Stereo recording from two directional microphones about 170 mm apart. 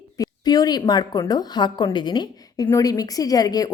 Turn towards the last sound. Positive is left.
turn(degrees=20)  # may be behind; listen again after turning